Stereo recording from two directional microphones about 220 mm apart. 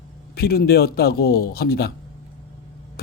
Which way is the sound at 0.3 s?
45° left (ahead or behind).